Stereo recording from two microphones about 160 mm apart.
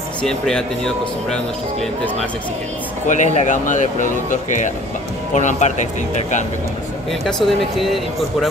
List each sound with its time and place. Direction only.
0.2 s speech: 5° left (ahead or behind)
3.1 s speech: 50° left (ahead or behind)
7.1 s speech: centre (ahead or behind)